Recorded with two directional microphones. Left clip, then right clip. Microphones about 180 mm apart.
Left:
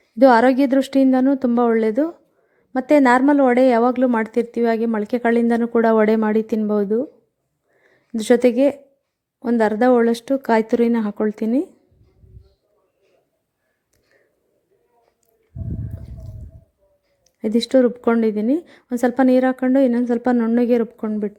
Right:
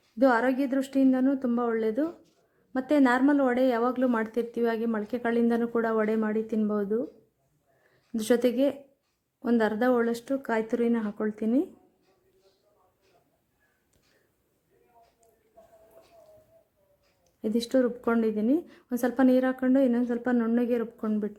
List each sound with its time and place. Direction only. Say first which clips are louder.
0.2 s a woman's voice: left 11 dB; 35° left (ahead or behind)
8.1 s a woman's voice: left 9 dB; 30° left (ahead or behind)
17.4 s a woman's voice: left 10 dB; 30° left (ahead or behind)